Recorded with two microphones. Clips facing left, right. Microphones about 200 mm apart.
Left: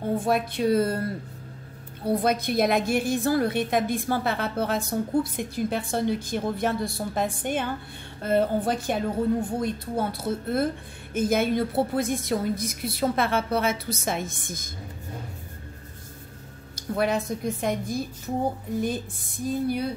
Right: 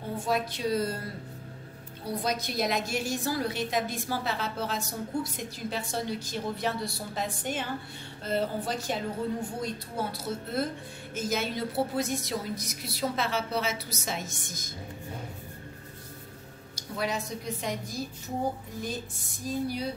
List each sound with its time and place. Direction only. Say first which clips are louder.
0.1 s a woman's voice: left 4 dB; 55° left (ahead or behind)
2.0 s a woman's voice: left 8 dB; 55° left (ahead or behind)
16.7 s a woman's voice: left 7 dB; 55° left (ahead or behind)